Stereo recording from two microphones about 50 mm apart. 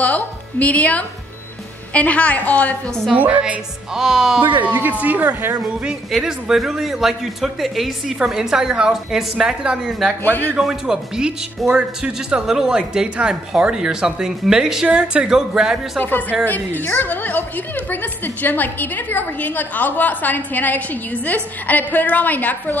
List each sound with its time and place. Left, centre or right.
0.0 s a woman's voice: left
3.2 s speech: right
3.9 s speech: centre
4.6 s speech: right
5.9 s speech: centre
10.2 s a woman's voice: left
10.6 s speech: centre
14.9 s a woman's voice: right
16.0 s a woman's voice: left